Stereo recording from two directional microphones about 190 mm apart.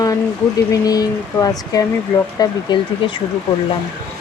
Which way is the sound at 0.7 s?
20° left (ahead or behind).